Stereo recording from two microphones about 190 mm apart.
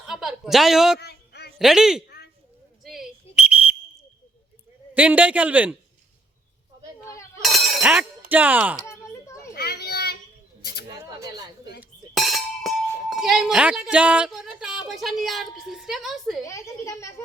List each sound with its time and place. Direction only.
0.1 s a woman's voice: centre (ahead or behind)
0.9 s a sound: 60° left (ahead or behind)
1.5 s speech: centre (ahead or behind)
2.0 s a sound: 55° left (ahead or behind)
2.8 s whistle: centre (ahead or behind)
4.9 s a man's voice: 5° right (ahead or behind)
7.4 s chink: centre (ahead or behind)
8.3 s a man's voice: 10° right (ahead or behind)
8.9 s a sound: 15° left (ahead or behind)
9.6 s children playing: 55° left (ahead or behind)
11.2 s a sound: 20° right (ahead or behind)
11.8 s chink: centre (ahead or behind)
16.4 s speech: 15° left (ahead or behind)